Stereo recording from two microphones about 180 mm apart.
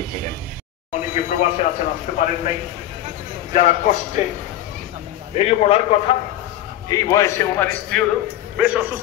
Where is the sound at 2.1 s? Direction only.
40° left (ahead or behind).